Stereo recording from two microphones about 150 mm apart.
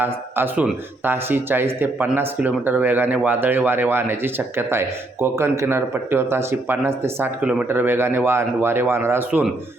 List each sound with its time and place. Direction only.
0.0 s speech: 15° right (ahead or behind)